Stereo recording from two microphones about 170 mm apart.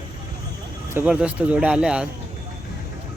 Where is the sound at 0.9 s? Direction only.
5° right (ahead or behind).